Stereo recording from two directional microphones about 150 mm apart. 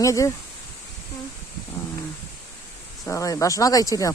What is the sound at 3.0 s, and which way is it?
Speech, 20° left (ahead or behind).